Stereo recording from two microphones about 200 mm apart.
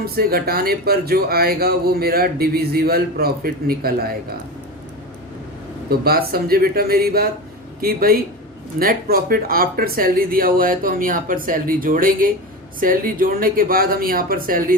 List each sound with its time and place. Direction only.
0.0 s speech: 50° right (ahead or behind)
5.9 s speech: 50° right (ahead or behind)